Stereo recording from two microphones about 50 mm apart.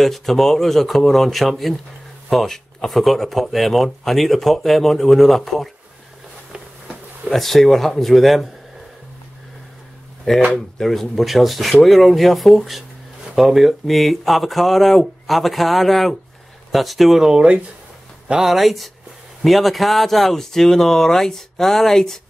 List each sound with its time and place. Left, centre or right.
0.0 s speech: centre
7.2 s speech: centre
10.3 s speech: centre
17.3 s speech: centre
18.4 s speech: centre